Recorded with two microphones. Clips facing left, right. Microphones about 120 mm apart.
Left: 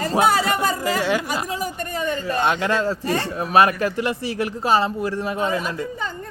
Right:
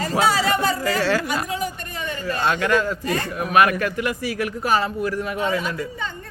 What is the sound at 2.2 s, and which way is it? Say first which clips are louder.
A man's voice: right 1 dB; 20° left (ahead or behind).